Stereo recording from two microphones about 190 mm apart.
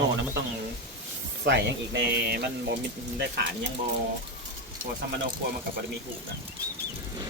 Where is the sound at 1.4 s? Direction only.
65° right (ahead or behind).